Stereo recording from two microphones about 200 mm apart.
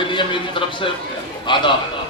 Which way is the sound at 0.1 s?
25° left (ahead or behind).